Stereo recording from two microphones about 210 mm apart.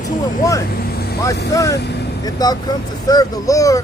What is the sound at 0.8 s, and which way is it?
Vehicle, 45° left (ahead or behind).